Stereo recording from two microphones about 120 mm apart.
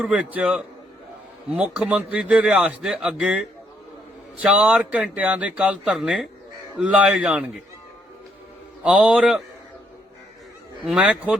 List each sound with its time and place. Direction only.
0.0 s a man's voice: 10° right (ahead or behind)
4.4 s a man's voice: 10° right (ahead or behind)
8.8 s a man's voice: 10° right (ahead or behind)
10.8 s a man's voice: 10° right (ahead or behind)